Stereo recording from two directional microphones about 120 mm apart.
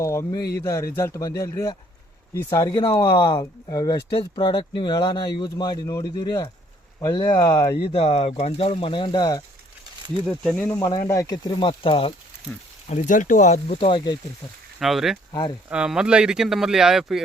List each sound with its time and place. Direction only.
0.0 s speech: 25° left (ahead or behind)
7.8 s speech: 55° left (ahead or behind); by 9.4 s 35° left (ahead or behind)
10.2 s speech: centre (ahead or behind)
10.8 s speech: 30° left (ahead or behind)
11.6 s speech: 50° left (ahead or behind)
12.9 s speech: 80° left
13.7 s speech: 50° left (ahead or behind)
14.8 s speech: centre (ahead or behind)
15.3 s speech: 40° left (ahead or behind)
15.7 s speech: 5° right (ahead or behind)